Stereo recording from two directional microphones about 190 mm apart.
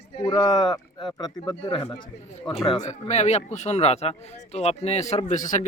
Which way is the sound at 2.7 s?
35° left (ahead or behind).